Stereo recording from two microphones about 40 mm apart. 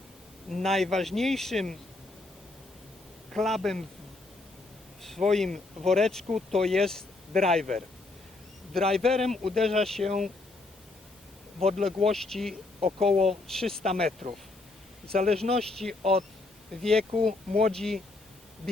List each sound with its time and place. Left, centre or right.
0.5 s speech: centre
3.3 s speech: centre
5.0 s speech: centre
8.7 s speech: centre
11.6 s speech: centre